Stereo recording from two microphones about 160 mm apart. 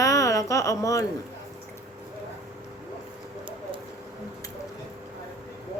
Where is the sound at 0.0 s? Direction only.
20° left (ahead or behind).